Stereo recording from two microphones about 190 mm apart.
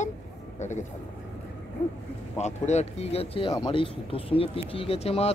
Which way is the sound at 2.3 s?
35° left (ahead or behind).